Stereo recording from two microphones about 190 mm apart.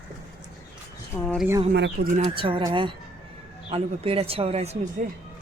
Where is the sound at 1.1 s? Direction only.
5° left (ahead or behind).